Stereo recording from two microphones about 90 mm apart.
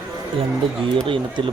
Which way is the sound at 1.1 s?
70° right (ahead or behind).